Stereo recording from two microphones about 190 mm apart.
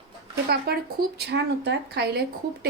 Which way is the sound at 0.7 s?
60° right (ahead or behind).